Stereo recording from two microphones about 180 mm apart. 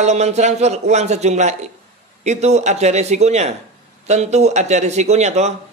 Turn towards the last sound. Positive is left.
turn(degrees=-40)  # may be behind; listen again after turning